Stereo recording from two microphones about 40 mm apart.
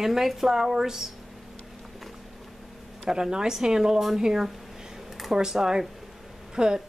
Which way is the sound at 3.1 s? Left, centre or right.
Centre.